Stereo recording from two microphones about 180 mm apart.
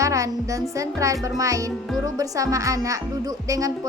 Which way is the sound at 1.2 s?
20° right (ahead or behind).